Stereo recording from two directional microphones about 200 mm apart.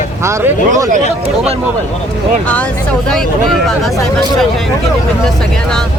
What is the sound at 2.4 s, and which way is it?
Speech, 5° left (ahead or behind).